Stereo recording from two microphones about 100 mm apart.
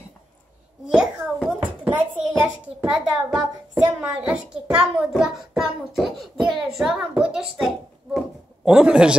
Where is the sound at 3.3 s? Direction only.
10° right (ahead or behind).